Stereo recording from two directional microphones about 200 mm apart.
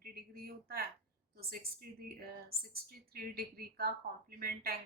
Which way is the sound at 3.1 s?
50° right (ahead or behind).